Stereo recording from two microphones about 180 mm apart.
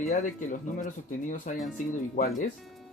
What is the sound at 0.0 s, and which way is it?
Speech, 45° left (ahead or behind).